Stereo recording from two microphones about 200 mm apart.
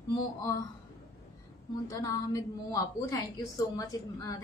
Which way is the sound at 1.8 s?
15° left (ahead or behind).